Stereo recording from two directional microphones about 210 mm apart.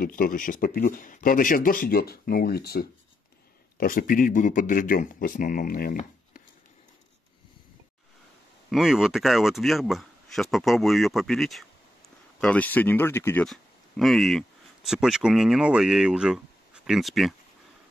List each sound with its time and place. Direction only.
0.0 s speech: 40° left (ahead or behind)
8.6 s speech: centre (ahead or behind)